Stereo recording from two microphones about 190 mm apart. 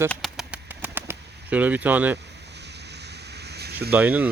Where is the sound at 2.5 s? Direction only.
60° right (ahead or behind).